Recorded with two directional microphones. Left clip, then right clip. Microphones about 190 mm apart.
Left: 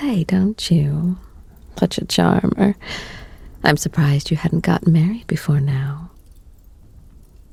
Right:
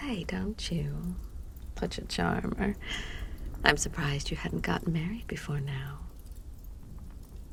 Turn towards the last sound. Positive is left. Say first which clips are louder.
# left 14 dB
turn(degrees=25)  # may be behind; listen again after turning